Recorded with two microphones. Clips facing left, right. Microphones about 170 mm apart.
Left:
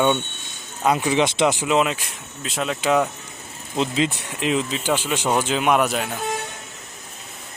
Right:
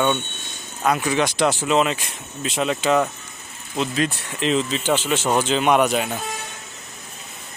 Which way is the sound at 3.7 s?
25° left (ahead or behind).